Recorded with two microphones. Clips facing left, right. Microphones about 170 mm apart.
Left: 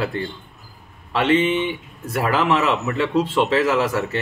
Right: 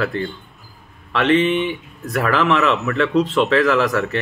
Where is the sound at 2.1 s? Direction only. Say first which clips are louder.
Right 2 dB; 25° left (ahead or behind).